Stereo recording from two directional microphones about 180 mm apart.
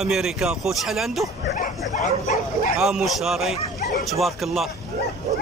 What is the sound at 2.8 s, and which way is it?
A man's voice, centre (ahead or behind).